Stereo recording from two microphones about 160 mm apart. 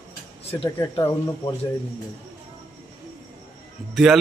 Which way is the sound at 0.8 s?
15° left (ahead or behind).